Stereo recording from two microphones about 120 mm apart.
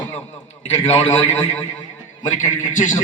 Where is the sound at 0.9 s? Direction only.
65° left (ahead or behind).